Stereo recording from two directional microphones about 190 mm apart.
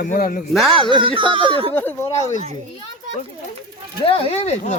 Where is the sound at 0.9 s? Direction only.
25° right (ahead or behind).